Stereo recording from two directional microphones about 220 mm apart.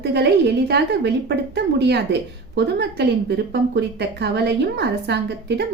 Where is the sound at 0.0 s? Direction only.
50° right (ahead or behind).